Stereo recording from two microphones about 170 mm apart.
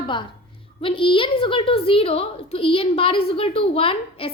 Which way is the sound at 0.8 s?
30° left (ahead or behind).